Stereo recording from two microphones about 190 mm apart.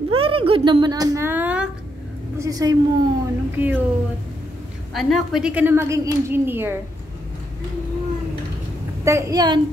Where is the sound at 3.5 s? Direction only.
10° right (ahead or behind).